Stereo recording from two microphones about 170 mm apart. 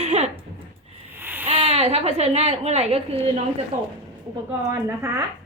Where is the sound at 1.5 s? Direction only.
35° right (ahead or behind).